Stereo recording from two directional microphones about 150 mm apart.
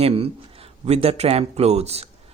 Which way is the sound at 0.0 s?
40° right (ahead or behind).